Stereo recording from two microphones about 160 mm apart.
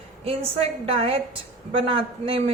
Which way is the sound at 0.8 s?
35° right (ahead or behind).